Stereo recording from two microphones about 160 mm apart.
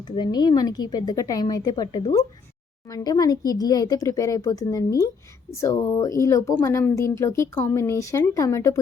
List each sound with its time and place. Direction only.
0.2 s a woman's voice: 25° left (ahead or behind)